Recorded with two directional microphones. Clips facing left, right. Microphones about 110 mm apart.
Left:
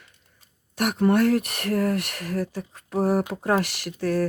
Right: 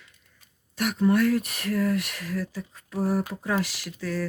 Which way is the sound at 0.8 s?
60° left (ahead or behind).